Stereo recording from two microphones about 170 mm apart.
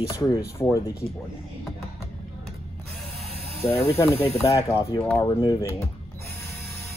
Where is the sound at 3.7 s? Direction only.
35° left (ahead or behind).